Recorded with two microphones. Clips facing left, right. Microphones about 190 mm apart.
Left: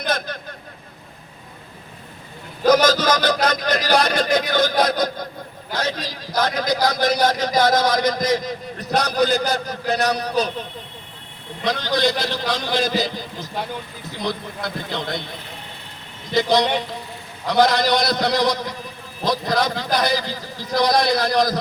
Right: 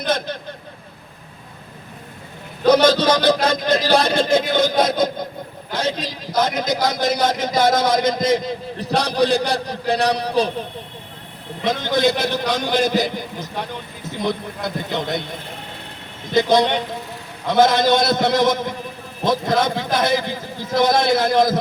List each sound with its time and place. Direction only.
2.8 s a man's voice: 30° right (ahead or behind)
11.6 s a man's voice: 25° right (ahead or behind)
11.9 s a man's voice: centre (ahead or behind)
12.5 s a man's voice: 20° right (ahead or behind)
16.3 s a man's voice: 20° right (ahead or behind)